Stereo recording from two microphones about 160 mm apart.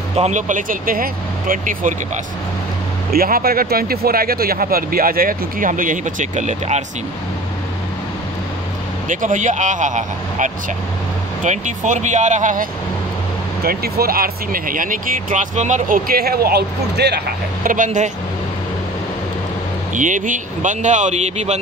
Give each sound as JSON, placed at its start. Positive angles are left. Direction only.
{"t": 0.1, "sound": "speech", "side_deg": -45}
{"t": 3.1, "sound": "speech", "side_deg": -65}
{"t": 9.1, "sound": "speech", "side_deg": -50}
{"t": 13.7, "sound": "speech", "side_deg": -70}
{"t": 17.6, "sound": "speech", "side_deg": -55}
{"t": 19.9, "sound": "speech", "side_deg": -50}